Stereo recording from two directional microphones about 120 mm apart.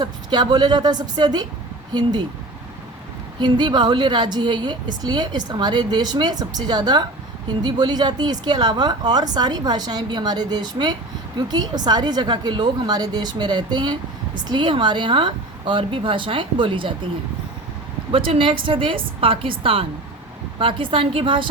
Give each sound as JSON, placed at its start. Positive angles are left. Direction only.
{"t": 0.0, "sound": "a woman's voice", "side_deg": -35}
{"t": 3.4, "sound": "a woman's voice", "side_deg": -40}
{"t": 18.1, "sound": "a woman's voice", "side_deg": -50}